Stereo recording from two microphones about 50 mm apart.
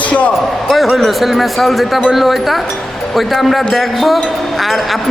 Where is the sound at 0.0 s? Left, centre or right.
Left.